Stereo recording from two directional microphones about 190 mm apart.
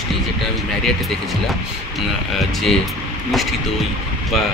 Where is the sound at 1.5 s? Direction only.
Centre (ahead or behind).